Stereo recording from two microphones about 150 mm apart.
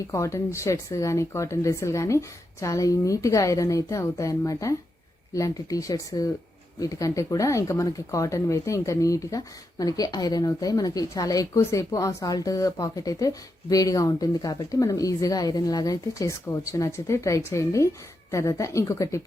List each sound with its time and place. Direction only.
0.1 s speech: 20° left (ahead or behind)